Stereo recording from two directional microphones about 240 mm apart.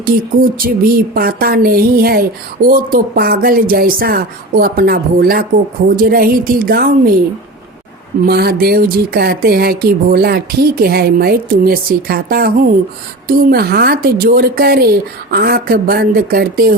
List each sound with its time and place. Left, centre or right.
0.6 s speech: right
8.2 s speech: right